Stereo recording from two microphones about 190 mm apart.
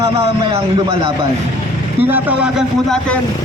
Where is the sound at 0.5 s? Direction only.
30° right (ahead or behind).